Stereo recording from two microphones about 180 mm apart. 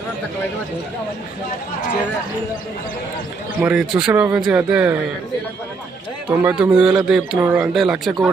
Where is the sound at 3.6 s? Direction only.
5° right (ahead or behind).